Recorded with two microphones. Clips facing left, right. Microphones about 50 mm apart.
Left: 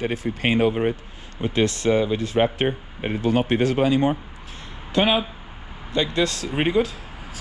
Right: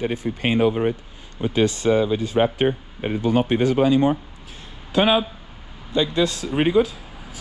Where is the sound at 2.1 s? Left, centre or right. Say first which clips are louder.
Right 1 dB; left.